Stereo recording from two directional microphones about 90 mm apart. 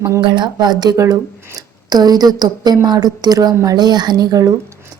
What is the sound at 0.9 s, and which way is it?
A woman's voice, 35° right (ahead or behind).